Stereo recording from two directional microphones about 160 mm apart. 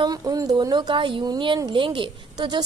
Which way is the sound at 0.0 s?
25° right (ahead or behind).